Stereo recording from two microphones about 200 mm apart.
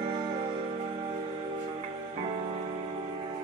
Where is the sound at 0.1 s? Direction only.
20° right (ahead or behind).